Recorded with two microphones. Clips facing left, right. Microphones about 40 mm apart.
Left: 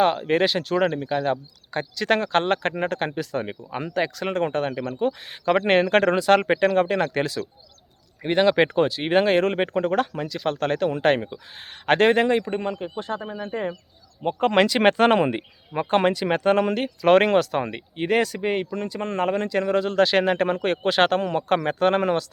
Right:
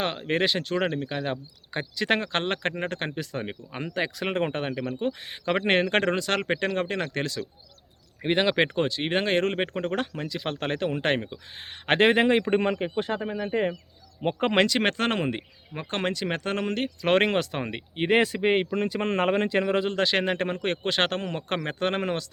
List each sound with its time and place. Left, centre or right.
0.0 s speech: centre
8.2 s speech: centre
12.3 s a man's voice: right
14.5 s speech: centre
17.9 s speech: right
19.9 s speech: centre